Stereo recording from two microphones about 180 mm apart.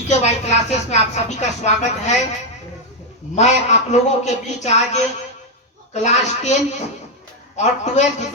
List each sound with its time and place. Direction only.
0.1 s a woman's voice: 40° left (ahead or behind)
3.3 s a woman's voice: 40° left (ahead or behind)